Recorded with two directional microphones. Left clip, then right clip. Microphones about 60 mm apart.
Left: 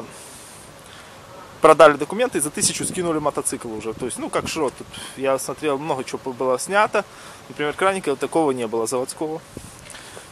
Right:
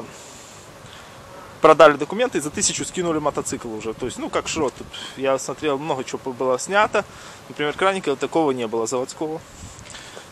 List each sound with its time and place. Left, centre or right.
1.6 s speech: centre